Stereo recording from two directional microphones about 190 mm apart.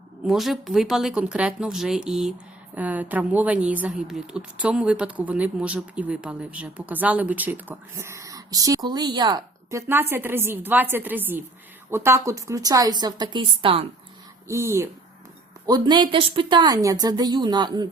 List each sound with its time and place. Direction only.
0.3 s a woman's voice: centre (ahead or behind); by 13.8 s 30° right (ahead or behind)
14.4 s a woman's voice: 15° right (ahead or behind)